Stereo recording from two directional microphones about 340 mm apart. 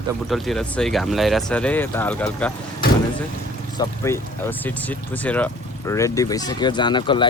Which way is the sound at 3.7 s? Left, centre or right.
Centre.